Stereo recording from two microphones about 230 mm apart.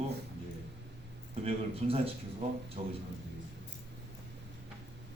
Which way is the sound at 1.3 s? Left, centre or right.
Right.